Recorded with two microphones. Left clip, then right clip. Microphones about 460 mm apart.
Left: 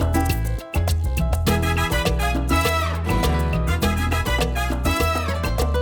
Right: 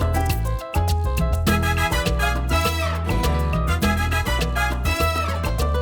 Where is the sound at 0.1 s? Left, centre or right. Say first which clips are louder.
Left 1 dB; left.